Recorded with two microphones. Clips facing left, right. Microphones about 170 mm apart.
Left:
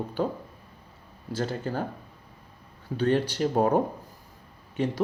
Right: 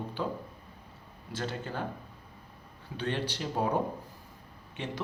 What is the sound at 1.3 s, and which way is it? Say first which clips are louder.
Speech: left 6 dB; 40° left (ahead or behind).